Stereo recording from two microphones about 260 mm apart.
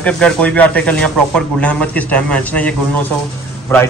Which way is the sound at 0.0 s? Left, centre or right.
Centre.